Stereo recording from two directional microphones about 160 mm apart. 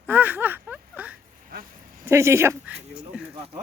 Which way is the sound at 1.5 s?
65° right (ahead or behind).